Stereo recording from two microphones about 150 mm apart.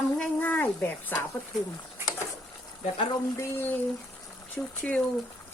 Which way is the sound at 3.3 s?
20° left (ahead or behind).